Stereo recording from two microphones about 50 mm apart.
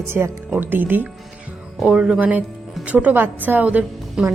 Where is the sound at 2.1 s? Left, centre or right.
Right.